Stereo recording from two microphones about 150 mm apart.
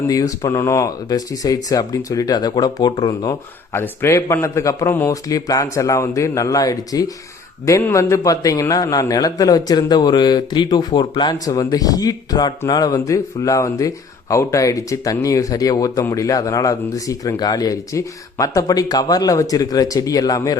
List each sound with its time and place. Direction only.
0.1 s speech: 25° left (ahead or behind)